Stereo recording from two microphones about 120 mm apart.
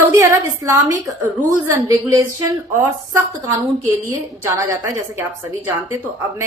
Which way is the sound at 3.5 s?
20° right (ahead or behind).